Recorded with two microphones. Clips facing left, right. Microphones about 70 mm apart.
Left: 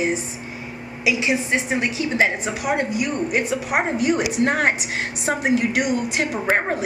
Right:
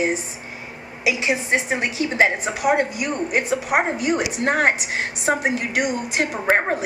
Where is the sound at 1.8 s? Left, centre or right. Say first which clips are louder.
Right 1 dB; right.